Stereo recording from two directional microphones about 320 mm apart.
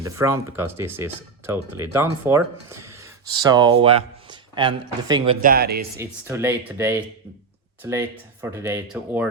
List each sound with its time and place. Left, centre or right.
0.0 s speech: centre; by 5.8 s right
6.0 s speech: centre